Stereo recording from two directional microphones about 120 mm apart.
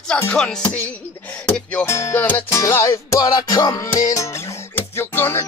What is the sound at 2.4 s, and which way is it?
Music, 25° left (ahead or behind).